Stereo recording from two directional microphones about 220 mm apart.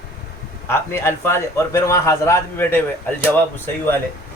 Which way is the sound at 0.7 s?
10° left (ahead or behind).